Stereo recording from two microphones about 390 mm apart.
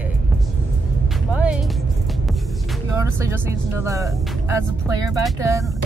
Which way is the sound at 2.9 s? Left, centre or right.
Centre.